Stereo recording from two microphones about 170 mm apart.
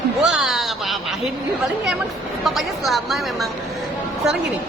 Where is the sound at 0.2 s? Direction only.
5° right (ahead or behind).